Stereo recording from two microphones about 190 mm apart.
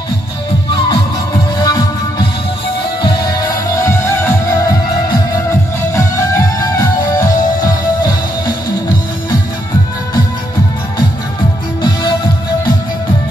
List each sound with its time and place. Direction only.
1.6 s music: 20° left (ahead or behind)
5.9 s music: 15° left (ahead or behind)
11.8 s music: 25° left (ahead or behind)